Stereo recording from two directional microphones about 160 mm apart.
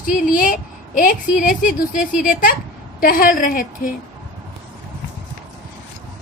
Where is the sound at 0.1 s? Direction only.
60° left (ahead or behind).